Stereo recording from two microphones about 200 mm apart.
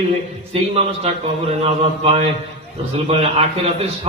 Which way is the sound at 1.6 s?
30° right (ahead or behind).